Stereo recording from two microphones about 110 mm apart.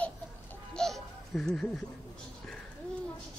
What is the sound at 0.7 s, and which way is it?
Baby laughter, 5° left (ahead or behind).